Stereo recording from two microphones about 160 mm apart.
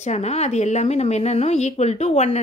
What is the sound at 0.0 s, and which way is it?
A woman's voice, 45° left (ahead or behind).